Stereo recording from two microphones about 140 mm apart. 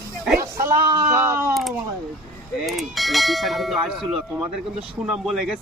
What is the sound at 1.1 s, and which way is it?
Speech, 20° right (ahead or behind).